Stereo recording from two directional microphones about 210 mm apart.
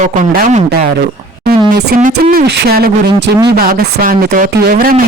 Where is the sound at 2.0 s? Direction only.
45° right (ahead or behind).